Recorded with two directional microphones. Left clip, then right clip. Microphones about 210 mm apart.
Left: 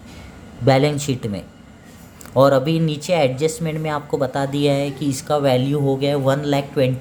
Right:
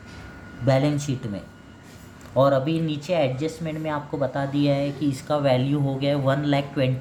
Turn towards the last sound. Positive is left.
turn(degrees=40)  # may be behind; listen again after turning